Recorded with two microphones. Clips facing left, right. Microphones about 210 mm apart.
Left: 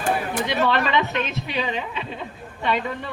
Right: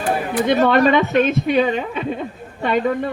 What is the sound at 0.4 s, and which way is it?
A woman's voice, 45° right (ahead or behind).